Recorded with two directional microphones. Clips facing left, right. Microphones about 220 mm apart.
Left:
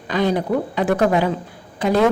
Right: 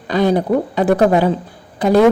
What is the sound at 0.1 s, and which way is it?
A woman's voice, 35° right (ahead or behind).